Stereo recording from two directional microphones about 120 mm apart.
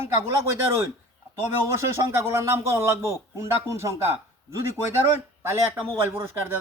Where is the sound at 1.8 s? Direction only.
20° right (ahead or behind).